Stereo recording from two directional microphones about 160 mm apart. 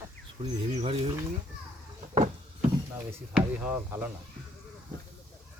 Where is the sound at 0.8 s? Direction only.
40° right (ahead or behind).